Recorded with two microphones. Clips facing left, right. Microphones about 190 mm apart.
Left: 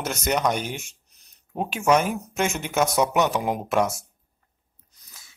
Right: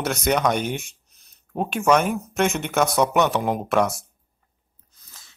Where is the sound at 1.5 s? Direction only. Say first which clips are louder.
Right 1 dB; 5° left (ahead or behind).